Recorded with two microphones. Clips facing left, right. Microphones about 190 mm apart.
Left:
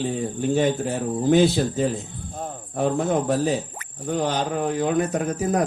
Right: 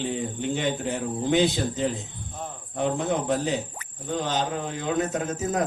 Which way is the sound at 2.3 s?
45° left (ahead or behind).